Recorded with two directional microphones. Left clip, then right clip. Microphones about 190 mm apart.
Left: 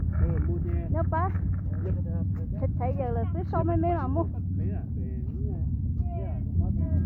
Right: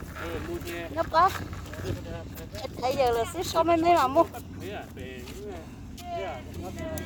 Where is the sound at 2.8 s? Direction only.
20° right (ahead or behind).